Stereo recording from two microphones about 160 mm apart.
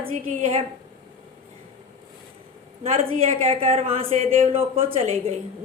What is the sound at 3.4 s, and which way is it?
Speech, 35° right (ahead or behind).